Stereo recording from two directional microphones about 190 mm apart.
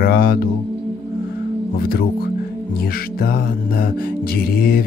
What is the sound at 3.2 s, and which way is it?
Speech, 50° left (ahead or behind).